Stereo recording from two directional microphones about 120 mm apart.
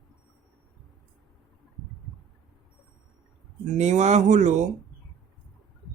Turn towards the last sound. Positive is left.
turn(degrees=-85)